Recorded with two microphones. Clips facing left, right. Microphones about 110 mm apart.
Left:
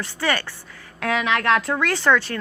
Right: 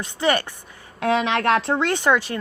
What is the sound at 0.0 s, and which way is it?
Speech, 20° right (ahead or behind).